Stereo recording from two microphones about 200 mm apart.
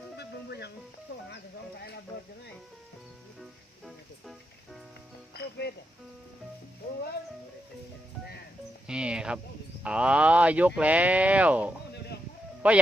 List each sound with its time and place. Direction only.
0.2 s music: 55° left (ahead or behind)
3.8 s music: centre (ahead or behind)
5.3 s music: 55° left (ahead or behind)
8.9 s a sound: 5° right (ahead or behind)
9.8 s speech: 5° right (ahead or behind)